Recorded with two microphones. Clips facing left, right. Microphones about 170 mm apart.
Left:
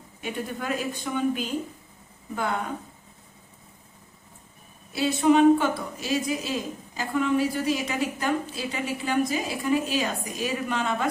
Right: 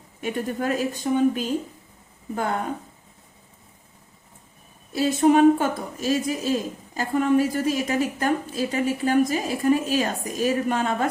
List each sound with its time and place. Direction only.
0.2 s a woman's voice: 45° right (ahead or behind)
4.9 s a woman's voice: 45° right (ahead or behind)